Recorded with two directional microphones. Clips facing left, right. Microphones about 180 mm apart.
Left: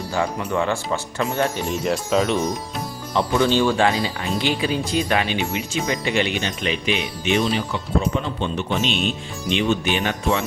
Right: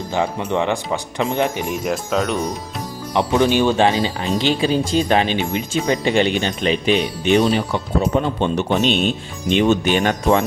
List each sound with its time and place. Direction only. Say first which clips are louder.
0.1 s speech: right 3 dB; 20° right (ahead or behind)
1.8 s speech: left 1 dB; centre (ahead or behind)
3.2 s speech: right 2 dB; 15° right (ahead or behind); by 10.4 s 45° right (ahead or behind)